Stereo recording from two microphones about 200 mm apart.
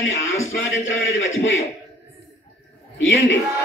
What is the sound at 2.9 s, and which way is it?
Speech, 65° left (ahead or behind).